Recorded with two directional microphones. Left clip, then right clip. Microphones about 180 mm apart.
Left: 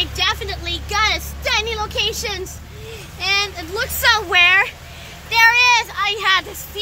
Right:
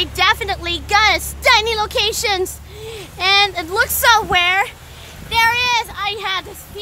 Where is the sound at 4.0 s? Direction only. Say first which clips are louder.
Left 1 dB; 30° right (ahead or behind); by 6.4 s 5° right (ahead or behind).